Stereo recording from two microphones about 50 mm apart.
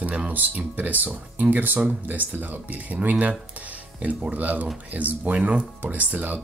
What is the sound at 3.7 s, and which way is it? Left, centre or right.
Music, right.